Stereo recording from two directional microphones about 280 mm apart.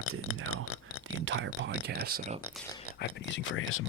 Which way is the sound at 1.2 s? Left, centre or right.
Right.